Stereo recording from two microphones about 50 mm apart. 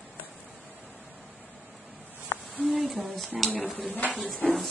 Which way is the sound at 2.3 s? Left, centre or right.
Left.